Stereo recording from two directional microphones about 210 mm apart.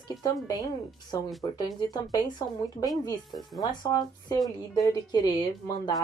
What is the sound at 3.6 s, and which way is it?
Speech, 15° left (ahead or behind).